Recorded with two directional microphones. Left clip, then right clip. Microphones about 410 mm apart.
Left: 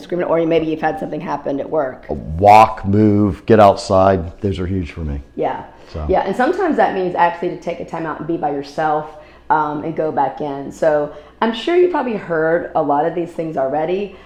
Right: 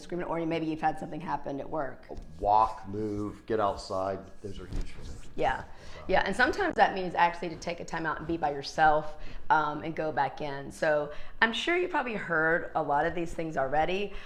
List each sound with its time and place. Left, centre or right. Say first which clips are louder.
0.1 s speech: left 17 dB; centre
2.0 s speech: left 18 dB; left
6.1 s a woman's voice: left 10 dB; centre